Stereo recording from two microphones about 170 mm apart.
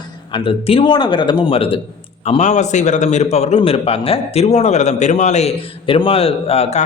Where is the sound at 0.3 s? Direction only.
30° left (ahead or behind).